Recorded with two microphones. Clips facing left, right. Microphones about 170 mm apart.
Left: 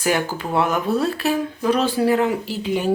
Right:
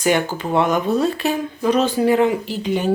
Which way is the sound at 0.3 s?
5° left (ahead or behind).